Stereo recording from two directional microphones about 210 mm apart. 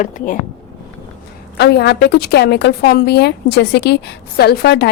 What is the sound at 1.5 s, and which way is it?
A woman's voice, 50° left (ahead or behind).